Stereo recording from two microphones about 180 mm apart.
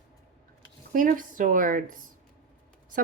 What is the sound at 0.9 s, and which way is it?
Speech, 50° right (ahead or behind).